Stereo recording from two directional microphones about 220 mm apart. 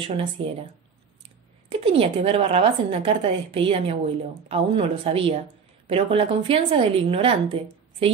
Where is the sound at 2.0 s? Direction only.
25° right (ahead or behind).